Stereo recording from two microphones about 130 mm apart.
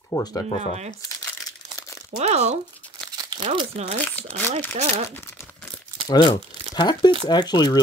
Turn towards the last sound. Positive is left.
turn(degrees=35)  # may be behind; listen again after turning